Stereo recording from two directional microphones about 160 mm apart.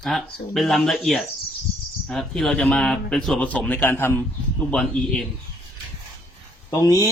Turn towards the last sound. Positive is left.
turn(degrees=20)  # may be behind; listen again after turning